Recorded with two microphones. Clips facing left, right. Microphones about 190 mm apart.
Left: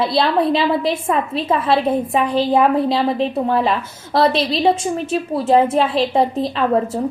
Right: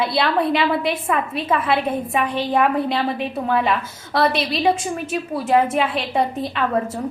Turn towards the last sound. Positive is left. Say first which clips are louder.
# left 4 dB
turn(degrees=30)  # may be behind; listen again after turning